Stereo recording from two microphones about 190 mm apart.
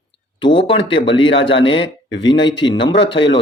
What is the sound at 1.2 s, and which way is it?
Speech, 80° left.